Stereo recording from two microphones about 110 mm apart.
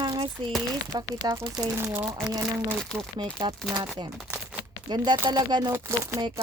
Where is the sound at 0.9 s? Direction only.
35° right (ahead or behind).